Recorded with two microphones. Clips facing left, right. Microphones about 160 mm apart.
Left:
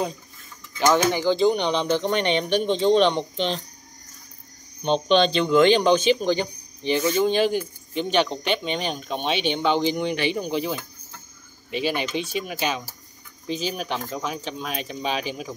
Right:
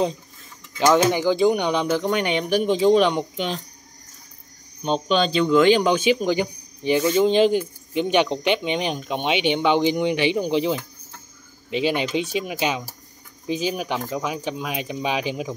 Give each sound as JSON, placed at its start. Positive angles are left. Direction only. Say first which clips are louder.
{"t": 0.7, "sound": "speech", "louder": "right 2 dB", "side_deg": -15}
{"t": 4.8, "sound": "speech", "louder": "left 2 dB", "side_deg": -5}